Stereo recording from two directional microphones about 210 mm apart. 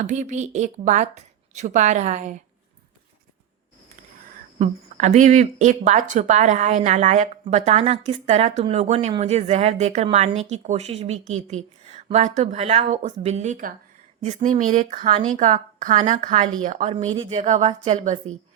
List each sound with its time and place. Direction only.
0.0 s speech: 35° right (ahead or behind)
4.5 s speech: 35° right (ahead or behind)
17.0 s speech: 25° right (ahead or behind)